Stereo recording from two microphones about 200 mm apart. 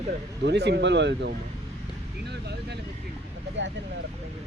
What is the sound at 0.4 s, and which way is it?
Speech, 60° right (ahead or behind).